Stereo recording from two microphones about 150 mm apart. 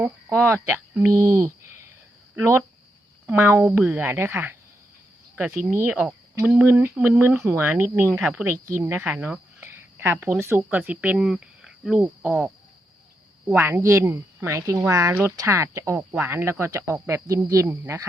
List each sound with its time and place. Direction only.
0.0 s speech: 15° right (ahead or behind)
13.5 s speech: 10° right (ahead or behind)